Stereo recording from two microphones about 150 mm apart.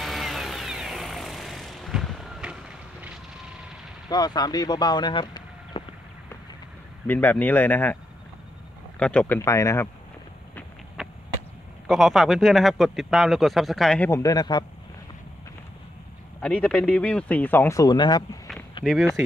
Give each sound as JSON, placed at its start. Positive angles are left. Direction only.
{"t": 0.0, "sound": "music", "side_deg": 0}
{"t": 4.1, "sound": "speech", "side_deg": 25}
{"t": 7.1, "sound": "speech", "side_deg": 10}
{"t": 9.0, "sound": "speech", "side_deg": 10}
{"t": 9.4, "sound": "speech", "side_deg": 20}
{"t": 11.0, "sound": "a sound", "side_deg": 0}
{"t": 11.9, "sound": "speech", "side_deg": 0}
{"t": 14.1, "sound": "speech", "side_deg": 25}
{"t": 16.3, "sound": "speech", "side_deg": 5}
{"t": 18.8, "sound": "a sound", "side_deg": 35}